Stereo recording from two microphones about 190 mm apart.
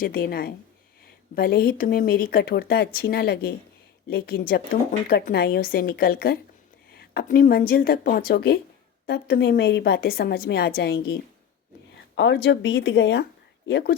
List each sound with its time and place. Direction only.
0.0 s a woman's voice: 50° left (ahead or behind)
12.1 s a woman's voice: 65° left (ahead or behind)